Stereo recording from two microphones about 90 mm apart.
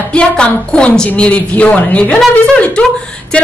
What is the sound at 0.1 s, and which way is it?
A woman's voice, 10° left (ahead or behind).